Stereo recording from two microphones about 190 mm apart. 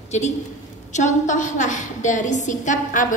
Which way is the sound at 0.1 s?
35° left (ahead or behind).